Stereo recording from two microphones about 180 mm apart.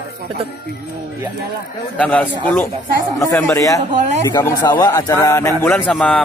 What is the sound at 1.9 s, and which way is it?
A man's voice, 10° left (ahead or behind).